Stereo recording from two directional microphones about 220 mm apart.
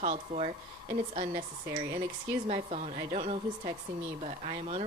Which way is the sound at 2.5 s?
30° right (ahead or behind).